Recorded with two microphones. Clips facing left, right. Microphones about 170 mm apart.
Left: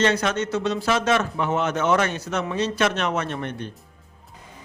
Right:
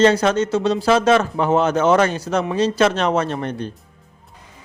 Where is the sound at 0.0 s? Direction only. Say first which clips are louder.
Right 7 dB; 30° right (ahead or behind).